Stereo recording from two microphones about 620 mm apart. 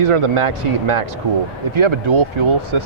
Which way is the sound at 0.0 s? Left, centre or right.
Right.